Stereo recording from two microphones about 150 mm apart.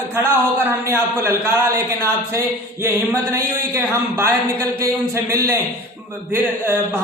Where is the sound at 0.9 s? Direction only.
15° right (ahead or behind).